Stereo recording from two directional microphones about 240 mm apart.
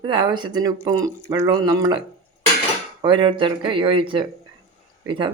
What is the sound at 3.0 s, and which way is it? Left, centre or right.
Speech, centre.